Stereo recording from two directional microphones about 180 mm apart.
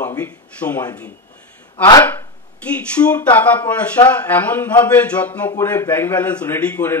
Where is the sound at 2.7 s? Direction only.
5° left (ahead or behind).